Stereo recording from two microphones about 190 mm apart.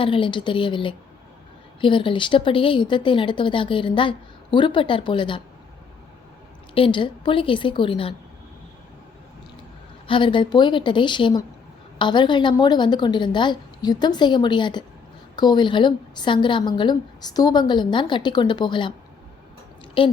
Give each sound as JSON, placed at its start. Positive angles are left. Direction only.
{"t": 0.0, "sound": "a woman's voice", "side_deg": 25}
{"t": 6.7, "sound": "a woman's voice", "side_deg": 25}
{"t": 10.1, "sound": "a woman's voice", "side_deg": 25}
{"t": 20.0, "sound": "a woman's voice", "side_deg": 25}